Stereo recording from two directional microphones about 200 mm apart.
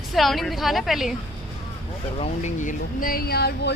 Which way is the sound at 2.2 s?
35° left (ahead or behind).